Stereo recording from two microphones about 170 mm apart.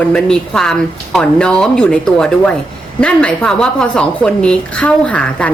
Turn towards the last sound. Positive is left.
turn(degrees=10)  # may be behind; listen again after turning